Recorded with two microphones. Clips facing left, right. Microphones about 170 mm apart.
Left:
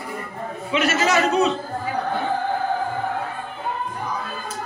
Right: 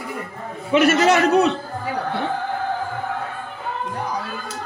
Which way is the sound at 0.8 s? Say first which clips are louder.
Right 3 dB; 65° right (ahead or behind).